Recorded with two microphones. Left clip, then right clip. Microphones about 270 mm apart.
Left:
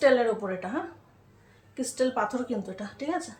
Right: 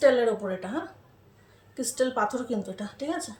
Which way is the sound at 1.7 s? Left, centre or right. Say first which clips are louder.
Right 1 dB; centre.